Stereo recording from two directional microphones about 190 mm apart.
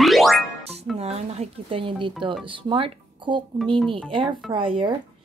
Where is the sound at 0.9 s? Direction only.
35° right (ahead or behind).